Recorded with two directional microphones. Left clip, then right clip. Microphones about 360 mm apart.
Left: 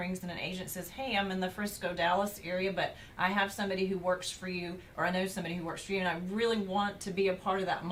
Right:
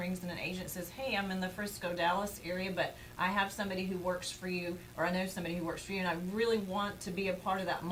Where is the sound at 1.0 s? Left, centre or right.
Centre.